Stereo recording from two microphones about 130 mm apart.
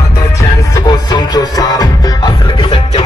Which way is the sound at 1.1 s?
30° left (ahead or behind).